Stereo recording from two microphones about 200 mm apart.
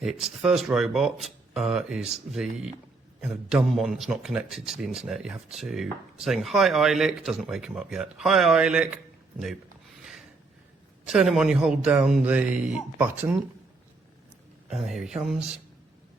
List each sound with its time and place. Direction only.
0.0 s a man's voice: centre (ahead or behind)
11.0 s a man's voice: centre (ahead or behind)
14.7 s a man's voice: centre (ahead or behind)